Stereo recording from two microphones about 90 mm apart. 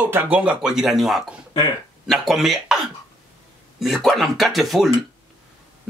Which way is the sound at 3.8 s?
Centre (ahead or behind).